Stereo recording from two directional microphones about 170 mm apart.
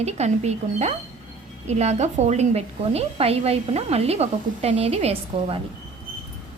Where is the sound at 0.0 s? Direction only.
40° right (ahead or behind).